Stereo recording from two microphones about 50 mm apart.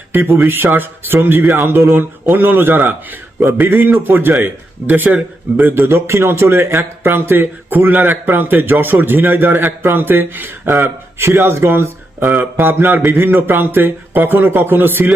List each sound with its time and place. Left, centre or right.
0.1 s a man's voice: right
2.2 s a man's voice: right
4.9 s a man's voice: right
11.3 s speech: right
12.4 s a man's voice: right